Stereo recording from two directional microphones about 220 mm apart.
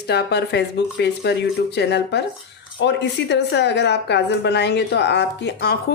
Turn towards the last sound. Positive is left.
turn(degrees=50)  # may be behind; listen again after turning